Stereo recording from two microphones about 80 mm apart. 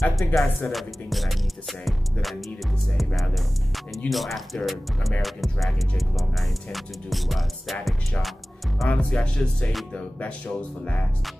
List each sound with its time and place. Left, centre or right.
0.0 s speech: centre
3.2 s speech: centre
8.8 s speech: centre